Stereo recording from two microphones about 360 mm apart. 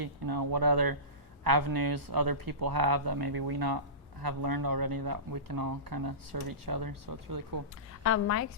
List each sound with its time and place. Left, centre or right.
0.0 s speech: right
8.0 s speech: left